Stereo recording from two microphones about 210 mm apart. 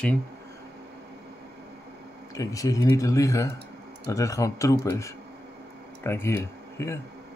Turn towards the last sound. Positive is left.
turn(degrees=10)  # may be behind; listen again after turning